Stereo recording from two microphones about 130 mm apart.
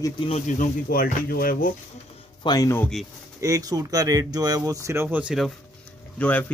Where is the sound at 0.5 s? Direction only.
85° left.